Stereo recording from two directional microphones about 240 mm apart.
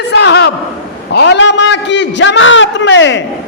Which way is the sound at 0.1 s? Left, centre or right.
Left.